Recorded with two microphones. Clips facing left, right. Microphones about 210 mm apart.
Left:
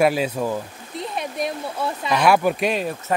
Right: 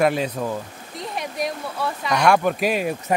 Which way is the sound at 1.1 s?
25° left (ahead or behind).